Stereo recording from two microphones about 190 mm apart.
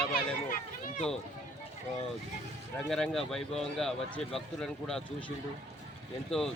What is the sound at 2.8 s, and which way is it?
Speech, centre (ahead or behind).